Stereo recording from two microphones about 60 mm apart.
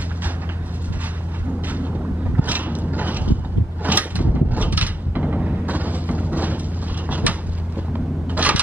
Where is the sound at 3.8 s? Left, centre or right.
Right.